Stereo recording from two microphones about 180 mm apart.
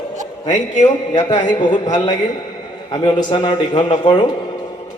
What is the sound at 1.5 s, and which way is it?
A man's voice, 25° left (ahead or behind).